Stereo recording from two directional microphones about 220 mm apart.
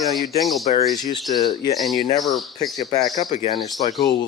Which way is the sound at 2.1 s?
Centre (ahead or behind).